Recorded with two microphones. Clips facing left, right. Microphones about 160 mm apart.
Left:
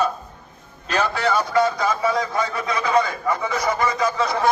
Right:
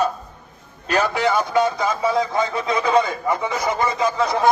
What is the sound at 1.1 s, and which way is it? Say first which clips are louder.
Speech: left 1 dB; 20° right (ahead or behind).